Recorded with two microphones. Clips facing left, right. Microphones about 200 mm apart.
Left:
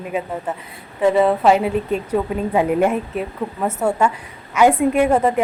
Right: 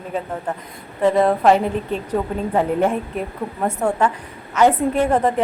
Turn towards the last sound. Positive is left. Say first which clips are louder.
# left 2 dB
turn(degrees=10)  # may be behind; listen again after turning